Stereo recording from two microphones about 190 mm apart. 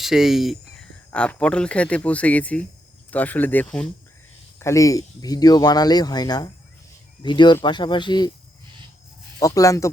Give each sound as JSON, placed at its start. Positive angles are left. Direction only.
{"t": 0.0, "sound": "speech", "side_deg": 0}
{"t": 9.4, "sound": "speech", "side_deg": 15}